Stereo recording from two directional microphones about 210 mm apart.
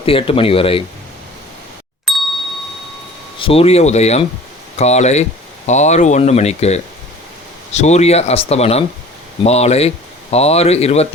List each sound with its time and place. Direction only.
0.0 s speech: 25° left (ahead or behind)
2.1 s ding: centre (ahead or behind)
3.3 s speech: 25° left (ahead or behind)